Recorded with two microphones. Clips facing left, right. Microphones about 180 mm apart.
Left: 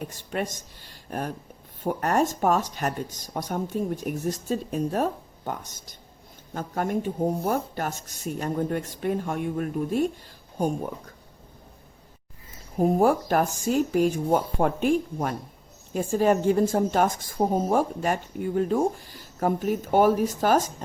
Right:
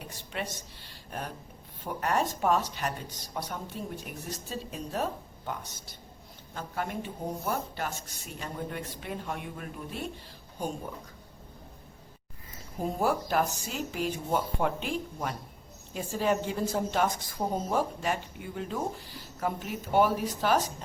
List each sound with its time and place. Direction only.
0.1 s a woman's voice: 45° left (ahead or behind)
12.8 s a woman's voice: 50° left (ahead or behind)